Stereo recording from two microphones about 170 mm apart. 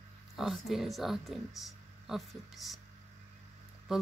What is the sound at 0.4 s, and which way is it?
Speech, centre (ahead or behind).